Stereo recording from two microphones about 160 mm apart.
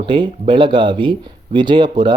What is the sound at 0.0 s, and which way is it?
Speech, 30° right (ahead or behind).